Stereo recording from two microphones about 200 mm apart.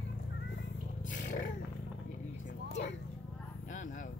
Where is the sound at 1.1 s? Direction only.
40° left (ahead or behind).